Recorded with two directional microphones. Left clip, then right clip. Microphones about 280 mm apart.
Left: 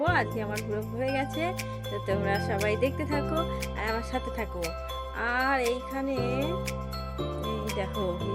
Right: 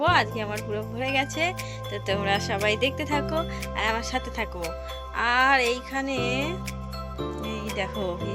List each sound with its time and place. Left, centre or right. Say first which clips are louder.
0.0 s speech: right 5 dB; centre